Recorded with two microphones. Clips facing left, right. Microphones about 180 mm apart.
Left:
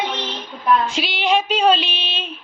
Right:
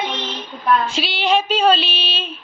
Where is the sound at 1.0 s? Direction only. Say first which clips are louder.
Right 1 dB; 15° left (ahead or behind).